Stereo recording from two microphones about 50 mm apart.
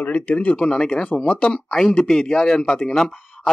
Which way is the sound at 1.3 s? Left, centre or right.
Left.